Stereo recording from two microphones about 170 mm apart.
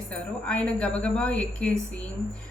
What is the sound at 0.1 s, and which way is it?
A woman's voice, 5° left (ahead or behind).